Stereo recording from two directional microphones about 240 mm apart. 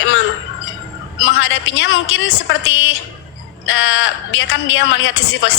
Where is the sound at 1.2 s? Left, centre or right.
Left.